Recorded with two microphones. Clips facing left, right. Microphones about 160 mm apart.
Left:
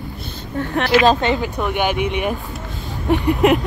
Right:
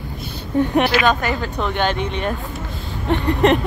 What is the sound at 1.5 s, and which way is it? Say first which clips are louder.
Speech: left 1 dB; 10° left (ahead or behind).